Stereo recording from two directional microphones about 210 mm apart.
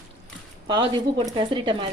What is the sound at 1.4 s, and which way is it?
Speech, 20° right (ahead or behind).